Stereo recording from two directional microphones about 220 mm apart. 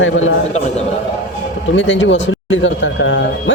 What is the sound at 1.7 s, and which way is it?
Speech, 60° left (ahead or behind).